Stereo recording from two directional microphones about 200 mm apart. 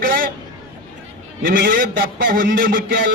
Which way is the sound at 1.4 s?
45° right (ahead or behind).